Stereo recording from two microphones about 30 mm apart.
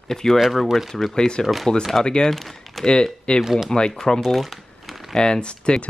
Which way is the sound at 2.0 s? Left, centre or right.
Left.